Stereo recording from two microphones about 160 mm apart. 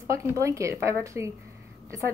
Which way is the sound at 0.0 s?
20° right (ahead or behind).